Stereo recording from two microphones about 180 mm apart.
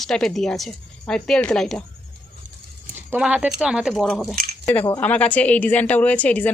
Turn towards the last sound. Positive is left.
turn(degrees=10)  # may be behind; listen again after turning